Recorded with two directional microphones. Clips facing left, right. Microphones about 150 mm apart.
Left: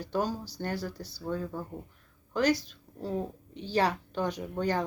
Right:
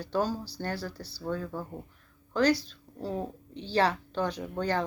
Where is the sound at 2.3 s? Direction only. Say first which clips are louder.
Right 2 dB; 20° left (ahead or behind).